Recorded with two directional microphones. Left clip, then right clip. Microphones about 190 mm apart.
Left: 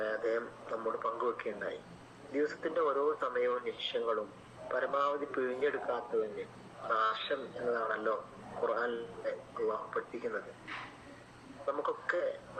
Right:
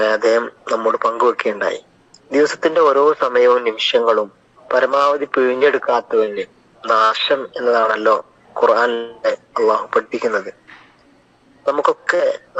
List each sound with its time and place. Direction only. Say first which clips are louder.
0.0 s speech: right 19 dB; 60° right (ahead or behind)
11.6 s speech: right 18 dB; 55° right (ahead or behind)